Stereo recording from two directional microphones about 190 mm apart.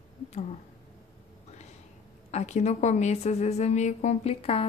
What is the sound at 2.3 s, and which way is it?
A woman's voice, 35° left (ahead or behind).